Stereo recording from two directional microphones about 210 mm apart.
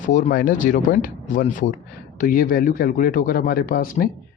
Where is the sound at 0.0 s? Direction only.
35° left (ahead or behind).